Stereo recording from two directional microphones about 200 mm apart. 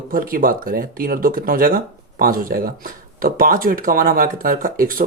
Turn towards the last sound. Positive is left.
turn(degrees=-45)  # may be behind; listen again after turning